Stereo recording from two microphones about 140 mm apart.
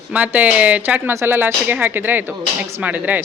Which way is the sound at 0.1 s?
10° right (ahead or behind).